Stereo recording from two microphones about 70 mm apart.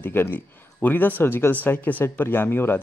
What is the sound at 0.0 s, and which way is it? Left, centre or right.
Speech, left.